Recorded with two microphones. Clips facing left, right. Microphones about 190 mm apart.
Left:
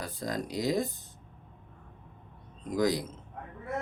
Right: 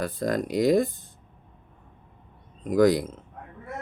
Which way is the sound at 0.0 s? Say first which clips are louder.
Right 8 dB; 55° right (ahead or behind).